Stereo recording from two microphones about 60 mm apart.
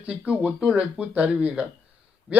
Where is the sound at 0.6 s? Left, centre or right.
Centre.